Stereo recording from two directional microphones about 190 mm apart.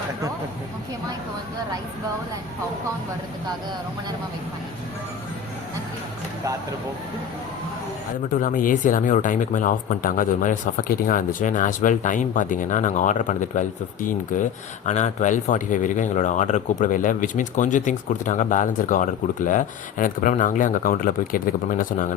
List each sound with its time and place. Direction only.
8.3 s speech: 45° left (ahead or behind)